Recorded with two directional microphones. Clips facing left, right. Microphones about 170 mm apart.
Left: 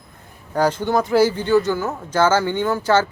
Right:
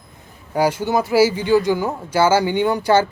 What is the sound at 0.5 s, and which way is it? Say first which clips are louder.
Speech: even; 10° right (ahead or behind).